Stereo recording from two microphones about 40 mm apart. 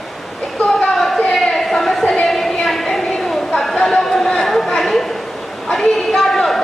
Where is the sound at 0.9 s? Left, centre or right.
Centre.